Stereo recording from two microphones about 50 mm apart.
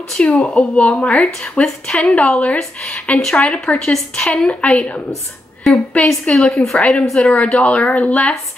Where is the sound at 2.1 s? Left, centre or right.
Left.